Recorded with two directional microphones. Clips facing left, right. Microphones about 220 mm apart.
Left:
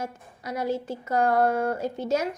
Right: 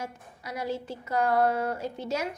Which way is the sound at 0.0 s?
50° left (ahead or behind).